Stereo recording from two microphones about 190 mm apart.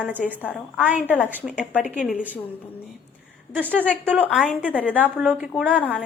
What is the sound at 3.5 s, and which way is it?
Speech, 10° right (ahead or behind).